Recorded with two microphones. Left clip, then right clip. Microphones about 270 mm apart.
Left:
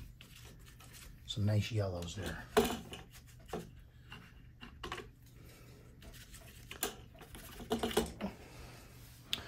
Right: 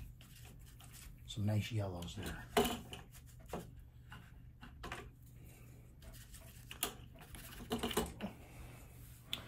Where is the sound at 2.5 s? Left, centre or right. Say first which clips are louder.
Left 3 dB; centre.